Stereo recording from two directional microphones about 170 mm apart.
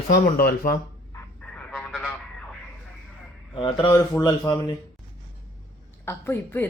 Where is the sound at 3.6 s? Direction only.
25° left (ahead or behind).